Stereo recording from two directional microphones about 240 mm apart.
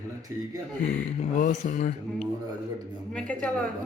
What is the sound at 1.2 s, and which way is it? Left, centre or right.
Speech, left.